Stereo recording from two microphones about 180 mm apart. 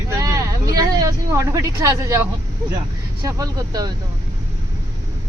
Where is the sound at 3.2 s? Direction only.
20° right (ahead or behind).